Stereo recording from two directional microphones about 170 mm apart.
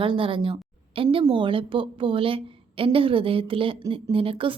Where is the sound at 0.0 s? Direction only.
30° right (ahead or behind).